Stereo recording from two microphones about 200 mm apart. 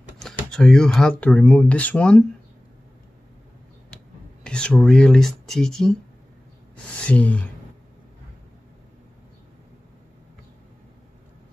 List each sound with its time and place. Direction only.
0.5 s speech: 5° left (ahead or behind)
3.9 s speech: 5° left (ahead or behind)